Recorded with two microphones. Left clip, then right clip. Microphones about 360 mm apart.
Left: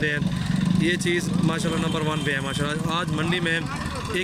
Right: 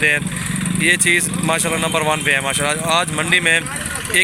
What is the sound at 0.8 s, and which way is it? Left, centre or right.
Speech, centre.